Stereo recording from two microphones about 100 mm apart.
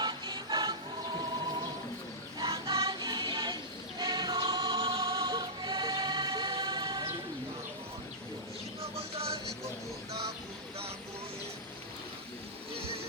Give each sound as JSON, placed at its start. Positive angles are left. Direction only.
{"t": 0.0, "sound": "music", "side_deg": -45}
{"t": 2.4, "sound": "music", "side_deg": -40}
{"t": 2.9, "sound": "choir", "side_deg": -45}
{"t": 8.8, "sound": "music", "side_deg": -80}